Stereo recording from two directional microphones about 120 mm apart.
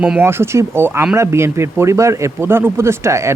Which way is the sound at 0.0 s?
15° right (ahead or behind).